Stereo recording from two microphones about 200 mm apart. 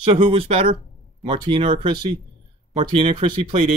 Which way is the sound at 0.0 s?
25° right (ahead or behind).